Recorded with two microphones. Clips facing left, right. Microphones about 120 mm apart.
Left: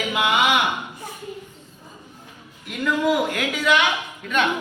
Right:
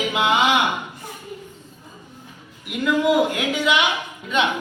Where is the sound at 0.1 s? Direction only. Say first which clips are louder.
Right 1 dB; 25° right (ahead or behind).